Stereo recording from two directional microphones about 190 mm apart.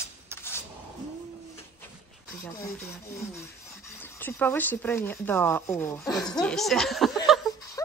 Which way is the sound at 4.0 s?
10° left (ahead or behind).